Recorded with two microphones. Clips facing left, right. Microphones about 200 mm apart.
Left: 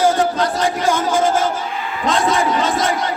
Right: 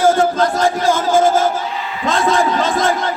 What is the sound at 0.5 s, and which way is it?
Music, centre (ahead or behind).